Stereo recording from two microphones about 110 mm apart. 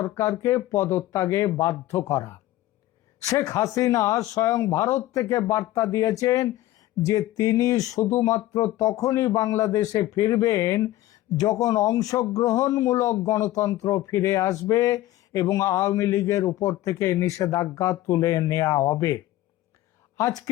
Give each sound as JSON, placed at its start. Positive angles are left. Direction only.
{"t": 0.2, "sound": "speech", "side_deg": 30}
{"t": 20.1, "sound": "speech", "side_deg": 30}